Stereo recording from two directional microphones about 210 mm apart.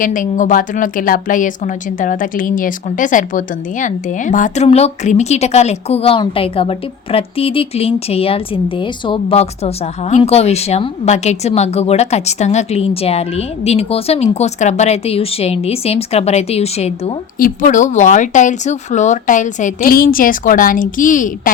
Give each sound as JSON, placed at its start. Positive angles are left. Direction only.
{"t": 0.0, "sound": "a woman's voice", "side_deg": 40}